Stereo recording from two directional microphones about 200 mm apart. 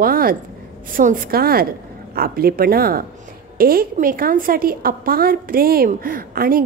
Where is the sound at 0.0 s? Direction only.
45° right (ahead or behind).